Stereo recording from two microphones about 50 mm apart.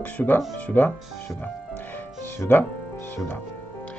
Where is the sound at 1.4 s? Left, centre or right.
Left.